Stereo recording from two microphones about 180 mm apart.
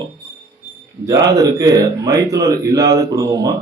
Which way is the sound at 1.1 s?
20° right (ahead or behind).